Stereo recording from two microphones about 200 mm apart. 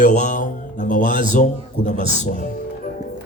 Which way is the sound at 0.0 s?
40° left (ahead or behind).